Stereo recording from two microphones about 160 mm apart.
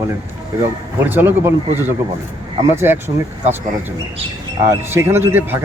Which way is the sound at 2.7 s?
15° right (ahead or behind).